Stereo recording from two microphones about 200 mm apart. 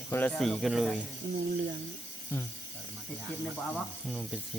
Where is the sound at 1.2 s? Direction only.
55° right (ahead or behind).